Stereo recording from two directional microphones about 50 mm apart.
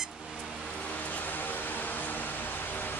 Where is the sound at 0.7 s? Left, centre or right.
Left.